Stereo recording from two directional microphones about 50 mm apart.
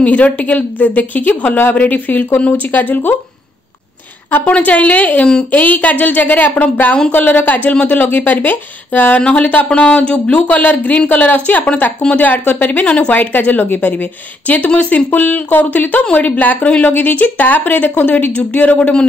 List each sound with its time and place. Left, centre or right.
0.0 s speech: left
4.5 s speech: left
7.1 s speech: left
9.2 s speech: left
12.8 s speech: left
13.1 s speech: left